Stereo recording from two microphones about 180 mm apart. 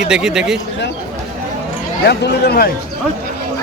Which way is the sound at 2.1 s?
60° left (ahead or behind).